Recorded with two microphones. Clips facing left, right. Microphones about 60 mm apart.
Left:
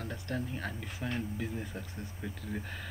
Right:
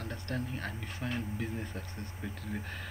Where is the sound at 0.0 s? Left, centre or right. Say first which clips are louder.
Left 1 dB; centre.